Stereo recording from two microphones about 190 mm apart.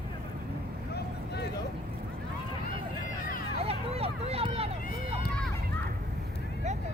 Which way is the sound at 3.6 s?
30° right (ahead or behind).